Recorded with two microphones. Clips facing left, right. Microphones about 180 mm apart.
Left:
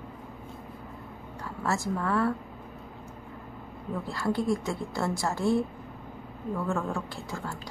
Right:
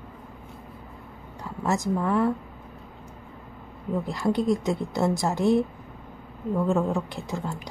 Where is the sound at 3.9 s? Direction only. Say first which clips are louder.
Right 4 dB; 20° right (ahead or behind).